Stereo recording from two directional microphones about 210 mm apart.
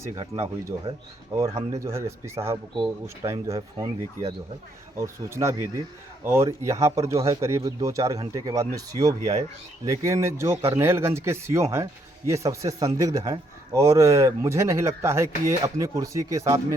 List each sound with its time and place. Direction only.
0.0 s speech: 15° right (ahead or behind)
4.9 s speech: 15° right (ahead or behind)